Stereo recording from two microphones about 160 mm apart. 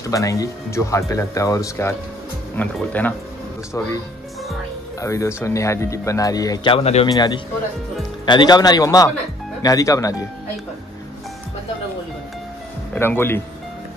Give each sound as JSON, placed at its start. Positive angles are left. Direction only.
{"t": 0.0, "sound": "speech", "side_deg": 20}
{"t": 5.0, "sound": "speech", "side_deg": 20}
{"t": 7.1, "sound": "speech", "side_deg": 25}
{"t": 12.9, "sound": "speech", "side_deg": 15}